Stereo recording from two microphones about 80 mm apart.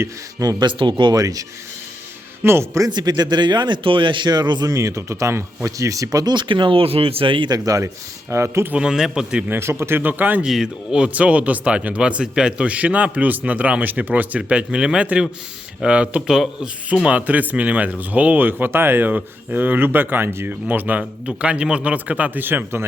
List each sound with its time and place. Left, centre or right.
0.0 s speech: right
0.6 s speech: right
1.1 s speech: right
2.4 s speech: right
2.8 s speech: right
4.7 s speech: right
6.3 s speech: right
7.6 s speech: right
8.3 s speech: right
8.7 s speech: centre
9.5 s speech: right
10.4 s speech: centre; by 22.9 s right